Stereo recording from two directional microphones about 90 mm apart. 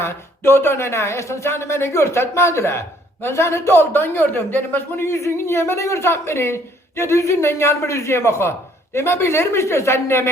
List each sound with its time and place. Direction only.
0.0 s a man's voice: 25° left (ahead or behind)